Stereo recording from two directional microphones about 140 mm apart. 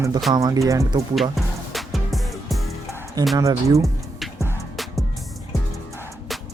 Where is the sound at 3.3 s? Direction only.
25° right (ahead or behind).